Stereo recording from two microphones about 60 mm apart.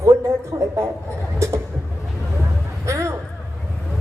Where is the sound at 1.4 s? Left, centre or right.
Right.